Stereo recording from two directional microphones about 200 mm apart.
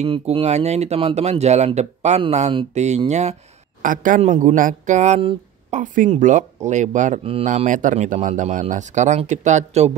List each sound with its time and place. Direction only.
0.0 s speech: 30° right (ahead or behind)